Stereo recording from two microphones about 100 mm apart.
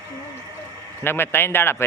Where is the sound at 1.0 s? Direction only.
25° left (ahead or behind).